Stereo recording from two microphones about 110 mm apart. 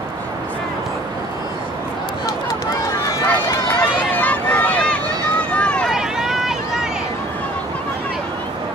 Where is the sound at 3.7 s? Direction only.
15° left (ahead or behind).